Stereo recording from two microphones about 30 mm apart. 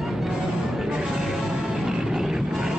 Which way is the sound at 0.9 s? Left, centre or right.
Centre.